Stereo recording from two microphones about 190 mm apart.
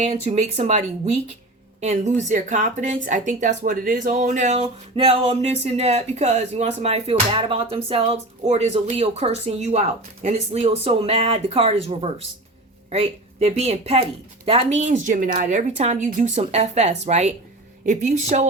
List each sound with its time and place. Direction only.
0.0 s speech: 35° right (ahead or behind)